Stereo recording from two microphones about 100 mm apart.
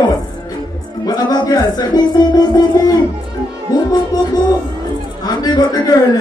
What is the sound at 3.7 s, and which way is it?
Music, 40° left (ahead or behind).